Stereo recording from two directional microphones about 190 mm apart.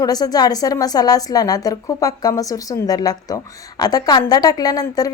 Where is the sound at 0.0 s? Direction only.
20° left (ahead or behind).